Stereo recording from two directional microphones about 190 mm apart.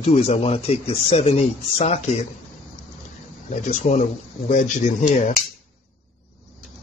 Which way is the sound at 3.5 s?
40° left (ahead or behind).